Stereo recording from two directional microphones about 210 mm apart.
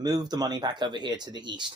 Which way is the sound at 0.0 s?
20° right (ahead or behind).